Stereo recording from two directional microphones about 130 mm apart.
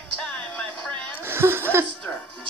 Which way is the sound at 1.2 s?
20° right (ahead or behind).